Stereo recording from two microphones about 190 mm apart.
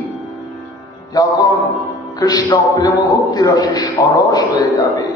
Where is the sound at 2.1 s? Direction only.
20° left (ahead or behind).